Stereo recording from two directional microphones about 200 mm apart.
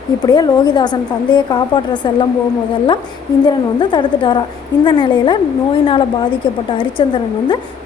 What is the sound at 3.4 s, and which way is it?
A woman's voice, 20° left (ahead or behind).